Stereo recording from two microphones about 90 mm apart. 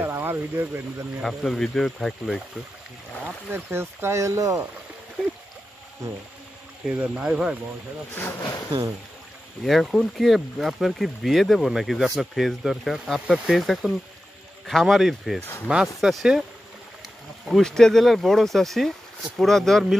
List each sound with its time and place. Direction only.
0.0 s speech: 25° right (ahead or behind)
1.2 s speech: 5° left (ahead or behind)
3.3 s speech: 25° right (ahead or behind)
7.2 s speech: 5° right (ahead or behind)
8.1 s speech: 25° left (ahead or behind)
8.4 s speech: 45° left (ahead or behind)
9.7 s speech: centre (ahead or behind)
15.4 s speech: 25° left (ahead or behind)
16.0 s speech: centre (ahead or behind)
17.5 s speech: 5° left (ahead or behind)